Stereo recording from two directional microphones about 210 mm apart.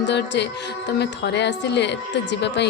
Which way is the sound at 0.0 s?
55° left (ahead or behind).